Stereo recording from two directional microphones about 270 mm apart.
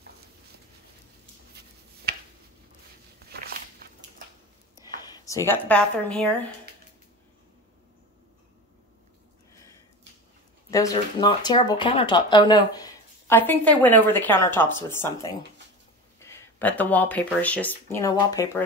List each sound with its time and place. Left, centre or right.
4.8 s speech: centre
10.7 s speech: centre